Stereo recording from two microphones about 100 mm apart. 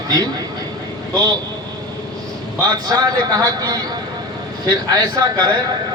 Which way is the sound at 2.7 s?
35° right (ahead or behind).